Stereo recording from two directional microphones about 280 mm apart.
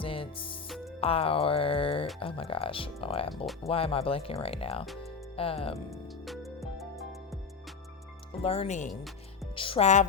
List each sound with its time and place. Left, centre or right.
0.0 s music: centre
1.0 s speech: left
5.9 s music: centre
8.3 s speech: left